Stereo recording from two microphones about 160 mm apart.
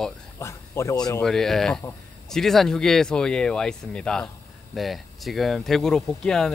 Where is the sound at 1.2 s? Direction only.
Centre (ahead or behind).